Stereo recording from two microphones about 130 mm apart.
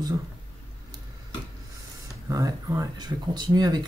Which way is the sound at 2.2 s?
25° right (ahead or behind).